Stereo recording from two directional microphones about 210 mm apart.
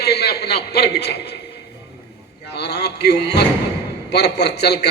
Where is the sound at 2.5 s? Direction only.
50° left (ahead or behind).